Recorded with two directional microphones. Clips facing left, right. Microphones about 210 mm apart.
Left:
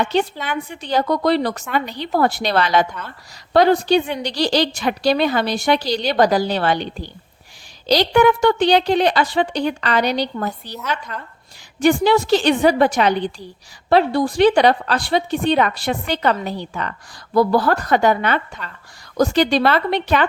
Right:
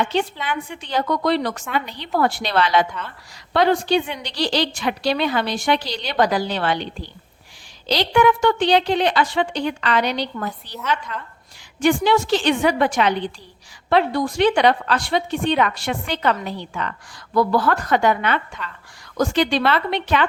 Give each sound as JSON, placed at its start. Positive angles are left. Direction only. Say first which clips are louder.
{"t": 0.0, "sound": "a woman's voice", "louder": "left 2 dB", "side_deg": 40}
{"t": 7.9, "sound": "a woman's voice", "louder": "left 3 dB", "side_deg": 40}